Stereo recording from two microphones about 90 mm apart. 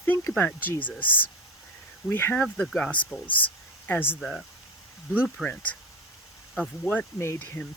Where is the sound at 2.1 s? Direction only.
25° left (ahead or behind).